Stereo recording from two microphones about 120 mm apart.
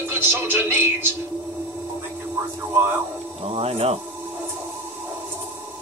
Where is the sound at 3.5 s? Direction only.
55° right (ahead or behind).